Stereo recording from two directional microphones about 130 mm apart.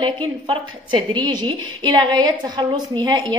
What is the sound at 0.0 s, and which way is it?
A woman's voice, 40° right (ahead or behind).